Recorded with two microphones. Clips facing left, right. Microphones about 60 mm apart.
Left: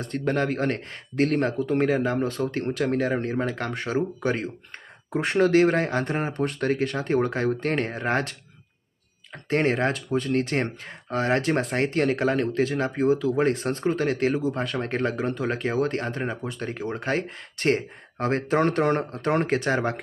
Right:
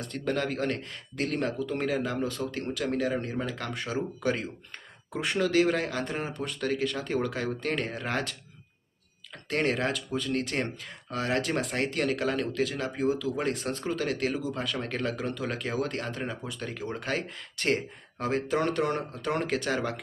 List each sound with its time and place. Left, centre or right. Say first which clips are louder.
0.0 s speech: left 5 dB; left